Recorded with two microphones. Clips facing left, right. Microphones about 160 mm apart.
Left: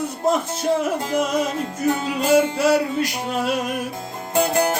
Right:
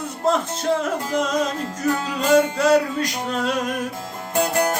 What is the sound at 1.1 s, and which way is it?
Music, 10° left (ahead or behind).